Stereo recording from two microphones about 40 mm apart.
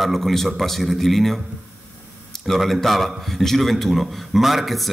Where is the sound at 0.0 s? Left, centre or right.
Centre.